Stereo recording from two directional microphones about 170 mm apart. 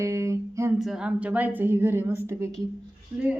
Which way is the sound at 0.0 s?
20° right (ahead or behind).